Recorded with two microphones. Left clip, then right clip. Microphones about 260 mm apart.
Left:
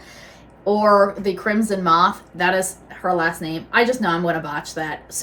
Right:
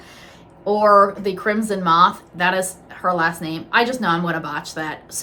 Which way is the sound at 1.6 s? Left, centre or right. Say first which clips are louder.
Right 1 dB; centre.